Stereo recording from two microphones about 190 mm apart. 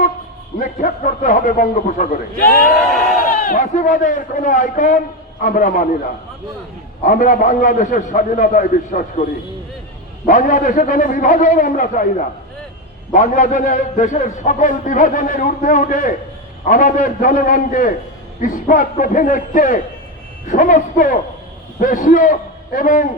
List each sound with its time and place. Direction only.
0.6 s a man's voice: 45° left (ahead or behind)
2.5 s speech: centre (ahead or behind)
3.2 s a man's voice: 45° left (ahead or behind)
7.0 s a man's voice: 45° left (ahead or behind)
10.2 s a man's voice: 45° left (ahead or behind)